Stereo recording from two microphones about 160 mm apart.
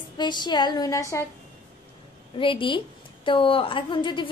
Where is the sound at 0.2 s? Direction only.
30° left (ahead or behind).